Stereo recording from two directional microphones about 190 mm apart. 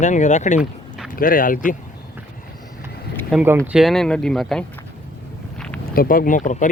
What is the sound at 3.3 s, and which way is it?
Speech, 10° right (ahead or behind).